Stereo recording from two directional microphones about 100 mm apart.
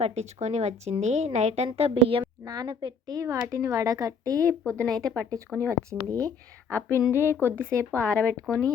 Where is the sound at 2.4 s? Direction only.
40° right (ahead or behind).